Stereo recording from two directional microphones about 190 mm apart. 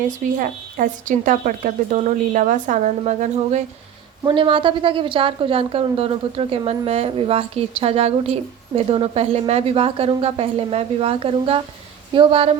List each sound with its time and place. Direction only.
0.1 s a woman's voice: 45° right (ahead or behind)
4.2 s a woman's voice: 25° right (ahead or behind)